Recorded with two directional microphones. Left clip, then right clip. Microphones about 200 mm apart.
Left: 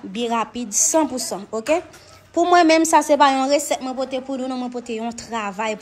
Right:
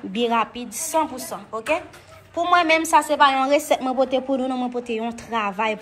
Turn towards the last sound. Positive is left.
turn(degrees=5)  # may be behind; listen again after turning